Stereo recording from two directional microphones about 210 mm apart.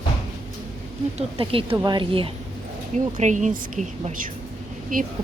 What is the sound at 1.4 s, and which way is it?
Speech, 25° right (ahead or behind).